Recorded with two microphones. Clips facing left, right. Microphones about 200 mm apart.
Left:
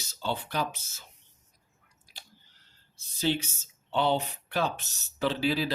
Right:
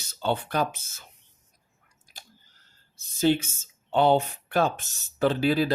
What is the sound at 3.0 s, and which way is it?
Speech, 50° right (ahead or behind).